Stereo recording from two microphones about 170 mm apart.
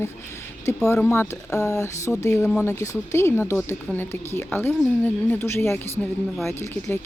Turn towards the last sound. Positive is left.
turn(degrees=15)  # may be behind; listen again after turning